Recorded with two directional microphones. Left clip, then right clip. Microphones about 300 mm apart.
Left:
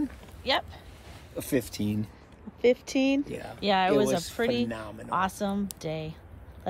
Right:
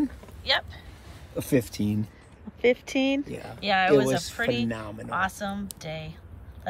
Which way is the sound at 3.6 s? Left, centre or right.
Centre.